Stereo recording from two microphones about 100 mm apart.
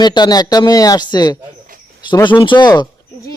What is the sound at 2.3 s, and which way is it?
Speech, 55° left (ahead or behind).